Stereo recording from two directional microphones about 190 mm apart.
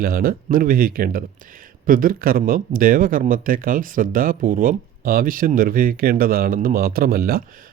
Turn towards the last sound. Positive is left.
turn(degrees=-50)  # may be behind; listen again after turning